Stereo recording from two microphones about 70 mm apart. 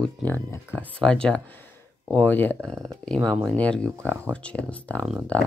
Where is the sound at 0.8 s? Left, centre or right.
Centre.